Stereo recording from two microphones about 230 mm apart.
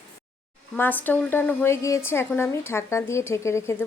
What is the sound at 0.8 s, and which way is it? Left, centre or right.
A woman's voice, centre.